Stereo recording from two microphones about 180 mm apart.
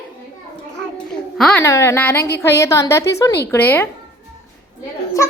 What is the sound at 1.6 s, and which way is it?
A woman's voice, 15° left (ahead or behind).